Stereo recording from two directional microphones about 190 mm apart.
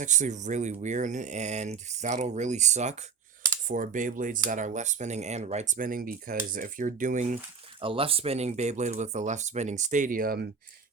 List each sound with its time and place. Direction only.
0.0 s speech: 40° right (ahead or behind)
7.8 s speech: 30° right (ahead or behind); by 10.5 s 55° right (ahead or behind)